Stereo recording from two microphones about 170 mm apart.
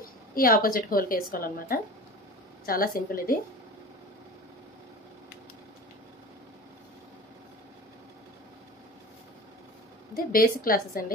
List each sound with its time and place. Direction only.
0.3 s speech: 55° left (ahead or behind)
10.1 s speech: 60° left (ahead or behind)